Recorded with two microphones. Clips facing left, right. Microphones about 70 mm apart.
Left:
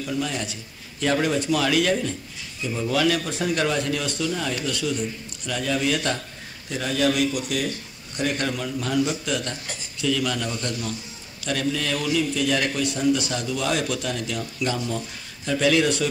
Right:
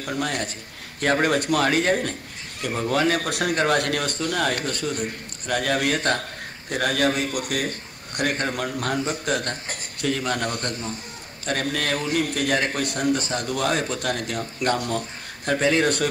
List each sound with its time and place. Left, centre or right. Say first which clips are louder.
0.0 s speech: right 1 dB; right
3.3 s speech: right 2 dB; right
15.6 s speech: left 1 dB; right